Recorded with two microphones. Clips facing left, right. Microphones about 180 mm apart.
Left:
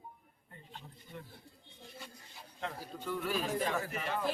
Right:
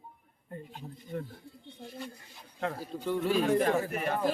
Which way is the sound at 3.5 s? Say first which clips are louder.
Right 8 dB; 60° right (ahead or behind).